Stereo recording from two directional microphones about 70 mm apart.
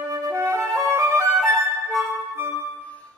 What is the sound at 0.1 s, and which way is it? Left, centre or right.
Music, right.